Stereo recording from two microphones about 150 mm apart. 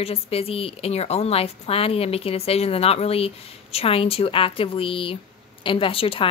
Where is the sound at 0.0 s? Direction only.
40° left (ahead or behind).